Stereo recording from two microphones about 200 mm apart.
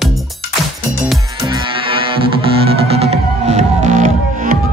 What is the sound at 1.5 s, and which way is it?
Music, 25° right (ahead or behind).